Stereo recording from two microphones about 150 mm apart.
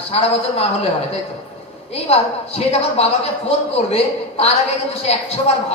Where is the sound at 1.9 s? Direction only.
45° left (ahead or behind).